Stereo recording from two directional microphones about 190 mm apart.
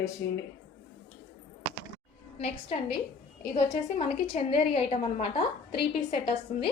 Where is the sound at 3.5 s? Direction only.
35° left (ahead or behind).